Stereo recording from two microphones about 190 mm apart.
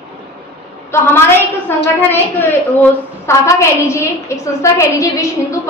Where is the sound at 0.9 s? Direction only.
10° left (ahead or behind).